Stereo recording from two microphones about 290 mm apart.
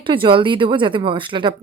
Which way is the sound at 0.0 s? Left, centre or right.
Centre.